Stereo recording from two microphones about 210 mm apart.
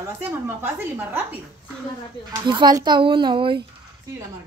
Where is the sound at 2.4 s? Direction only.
20° right (ahead or behind).